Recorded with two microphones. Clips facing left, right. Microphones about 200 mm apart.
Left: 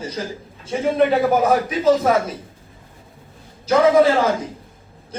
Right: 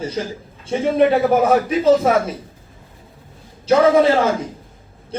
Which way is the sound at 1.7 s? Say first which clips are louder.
Right 2 dB; 30° right (ahead or behind).